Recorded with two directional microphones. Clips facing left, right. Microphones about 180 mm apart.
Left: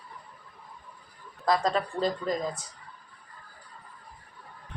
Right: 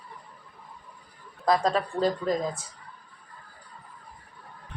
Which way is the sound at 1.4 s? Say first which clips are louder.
Right 2 dB; 5° right (ahead or behind).